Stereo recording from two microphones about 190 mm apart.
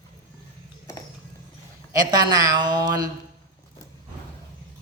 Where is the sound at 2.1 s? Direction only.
20° right (ahead or behind).